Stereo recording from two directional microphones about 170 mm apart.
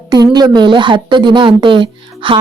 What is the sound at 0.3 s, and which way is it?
Speech, 25° right (ahead or behind).